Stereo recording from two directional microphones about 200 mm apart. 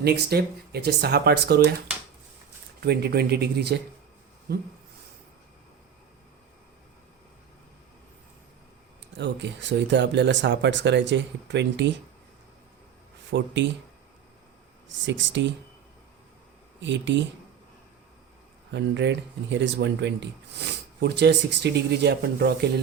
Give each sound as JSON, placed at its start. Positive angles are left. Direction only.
{"t": 0.0, "sound": "speech", "side_deg": -55}
{"t": 2.8, "sound": "speech", "side_deg": -55}
{"t": 9.1, "sound": "speech", "side_deg": -60}
{"t": 13.3, "sound": "speech", "side_deg": -60}
{"t": 14.8, "sound": "speech", "side_deg": -65}
{"t": 16.8, "sound": "speech", "side_deg": -65}
{"t": 18.7, "sound": "speech", "side_deg": -60}